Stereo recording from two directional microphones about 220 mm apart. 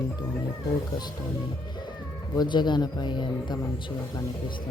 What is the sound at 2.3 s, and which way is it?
Speech, 20° left (ahead or behind).